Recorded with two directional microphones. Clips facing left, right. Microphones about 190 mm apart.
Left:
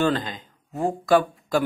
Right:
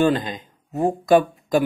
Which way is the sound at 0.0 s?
15° right (ahead or behind).